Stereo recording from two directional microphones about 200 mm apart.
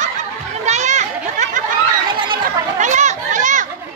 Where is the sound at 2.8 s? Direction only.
35° right (ahead or behind).